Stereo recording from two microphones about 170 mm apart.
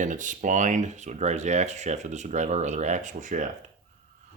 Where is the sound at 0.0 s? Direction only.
50° right (ahead or behind).